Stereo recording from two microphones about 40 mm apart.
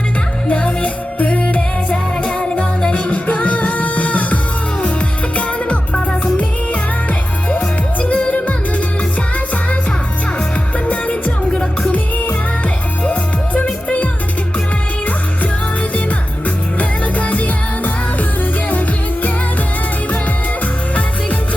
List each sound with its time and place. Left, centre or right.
0.4 s music: left
2.4 s music: centre
2.9 s music: left
8.0 s music: left
10.8 s music: left
13.1 s music: left
16.7 s music: left